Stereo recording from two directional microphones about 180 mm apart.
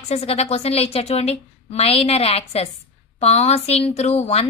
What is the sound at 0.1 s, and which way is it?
A woman's voice, 35° left (ahead or behind).